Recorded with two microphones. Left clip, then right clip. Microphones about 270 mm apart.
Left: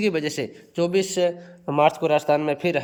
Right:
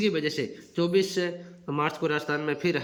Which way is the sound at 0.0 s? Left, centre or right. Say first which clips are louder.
Left 3 dB; centre.